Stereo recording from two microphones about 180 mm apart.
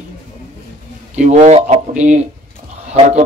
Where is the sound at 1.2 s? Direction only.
40° right (ahead or behind).